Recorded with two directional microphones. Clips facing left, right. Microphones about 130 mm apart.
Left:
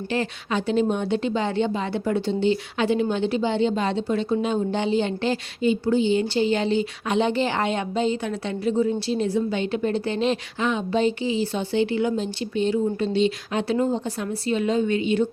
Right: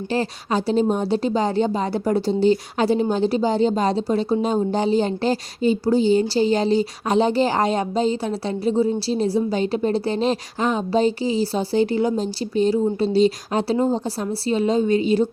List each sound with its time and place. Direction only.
0.1 s speech: 35° right (ahead or behind)